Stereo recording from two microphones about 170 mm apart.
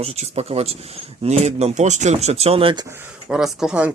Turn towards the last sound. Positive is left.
turn(degrees=-5)  # may be behind; listen again after turning